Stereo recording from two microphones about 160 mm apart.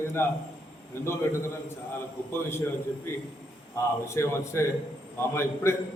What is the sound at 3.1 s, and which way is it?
A man's voice, 15° left (ahead or behind).